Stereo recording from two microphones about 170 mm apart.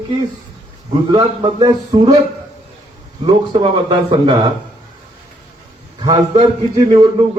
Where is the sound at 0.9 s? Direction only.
30° right (ahead or behind).